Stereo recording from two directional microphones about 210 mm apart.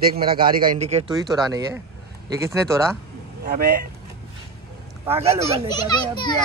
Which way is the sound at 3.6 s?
50° right (ahead or behind).